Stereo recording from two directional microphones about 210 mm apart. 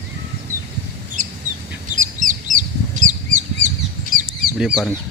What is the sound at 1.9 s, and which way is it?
Bird, 40° right (ahead or behind).